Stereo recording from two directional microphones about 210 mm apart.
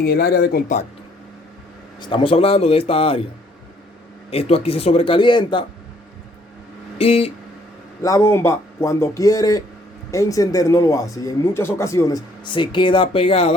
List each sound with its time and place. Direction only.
0.0 s speech: 50° left (ahead or behind)
2.0 s a man's voice: 25° left (ahead or behind)
4.3 s a man's voice: 30° left (ahead or behind)
7.0 s a man's voice: 30° left (ahead or behind)
8.0 s speech: 15° left (ahead or behind)